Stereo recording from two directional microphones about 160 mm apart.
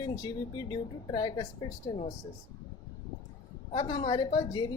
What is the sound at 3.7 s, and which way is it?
Speech, 30° left (ahead or behind).